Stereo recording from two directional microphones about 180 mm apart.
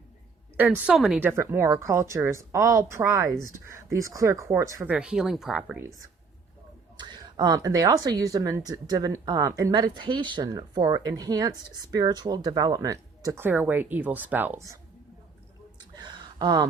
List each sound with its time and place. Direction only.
0.5 s a woman's voice: 10° right (ahead or behind)
6.9 s speech: 25° right (ahead or behind)
16.0 s a sound: 25° right (ahead or behind)